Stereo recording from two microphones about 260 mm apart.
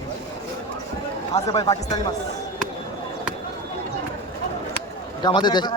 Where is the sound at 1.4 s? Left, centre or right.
Centre.